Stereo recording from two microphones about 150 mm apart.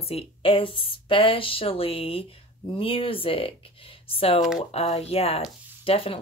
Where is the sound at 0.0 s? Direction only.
40° left (ahead or behind).